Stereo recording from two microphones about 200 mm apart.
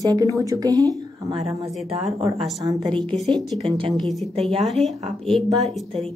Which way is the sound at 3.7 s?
25° right (ahead or behind).